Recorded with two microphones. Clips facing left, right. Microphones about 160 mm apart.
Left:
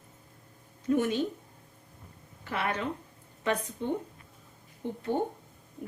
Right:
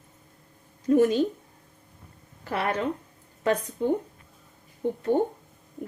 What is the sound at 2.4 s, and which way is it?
A woman's voice, 40° right (ahead or behind).